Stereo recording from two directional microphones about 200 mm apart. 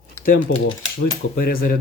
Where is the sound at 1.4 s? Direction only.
45° left (ahead or behind).